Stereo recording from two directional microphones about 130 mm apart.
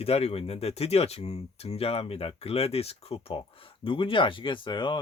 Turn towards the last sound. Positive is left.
turn(degrees=40)  # may be behind; listen again after turning